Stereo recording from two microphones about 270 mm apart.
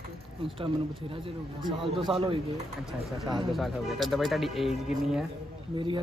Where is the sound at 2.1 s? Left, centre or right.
Centre.